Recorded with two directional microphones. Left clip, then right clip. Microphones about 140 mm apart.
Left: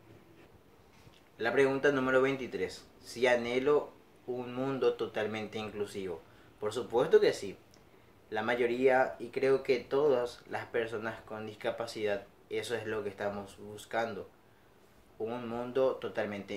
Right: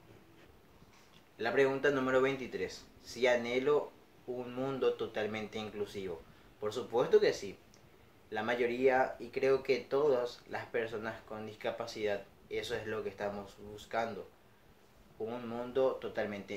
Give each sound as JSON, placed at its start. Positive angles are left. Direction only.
{"t": 1.4, "sound": "speech", "side_deg": 20}
{"t": 15.2, "sound": "speech", "side_deg": 25}